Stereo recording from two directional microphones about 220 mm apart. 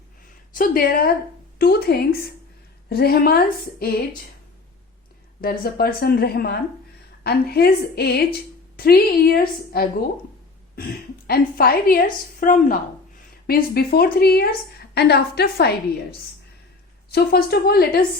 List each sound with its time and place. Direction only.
0.5 s a woman's voice: 40° left (ahead or behind)
5.4 s a woman's voice: 45° left (ahead or behind)
11.3 s a woman's voice: 45° left (ahead or behind)
17.1 s a woman's voice: 45° left (ahead or behind)